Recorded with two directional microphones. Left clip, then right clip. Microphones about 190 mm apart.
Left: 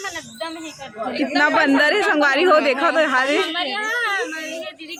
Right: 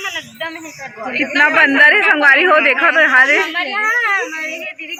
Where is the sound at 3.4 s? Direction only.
35° right (ahead or behind).